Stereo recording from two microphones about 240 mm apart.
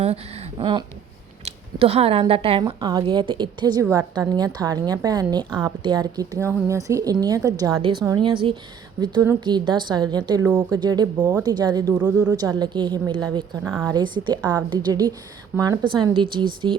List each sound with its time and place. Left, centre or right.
0.6 s a woman's voice: centre
10.4 s a woman's voice: centre
11.9 s a woman's voice: centre